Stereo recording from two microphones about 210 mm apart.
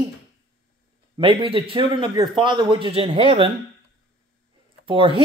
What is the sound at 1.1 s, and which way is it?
A man's voice, 25° right (ahead or behind).